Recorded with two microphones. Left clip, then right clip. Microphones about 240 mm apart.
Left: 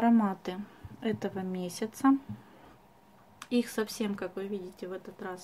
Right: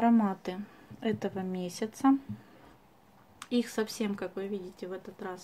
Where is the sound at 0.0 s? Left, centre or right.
Centre.